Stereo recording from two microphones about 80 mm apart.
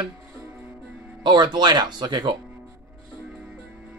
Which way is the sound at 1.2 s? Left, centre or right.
Right.